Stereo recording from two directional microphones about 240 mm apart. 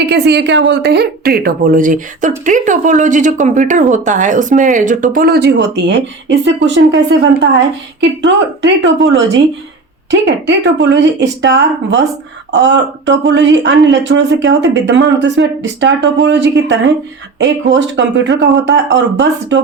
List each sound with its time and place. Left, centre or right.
0.0 s a woman's voice: right